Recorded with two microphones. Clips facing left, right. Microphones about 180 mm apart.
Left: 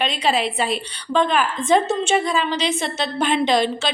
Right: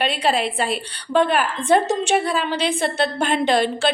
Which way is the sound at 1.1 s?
10° right (ahead or behind).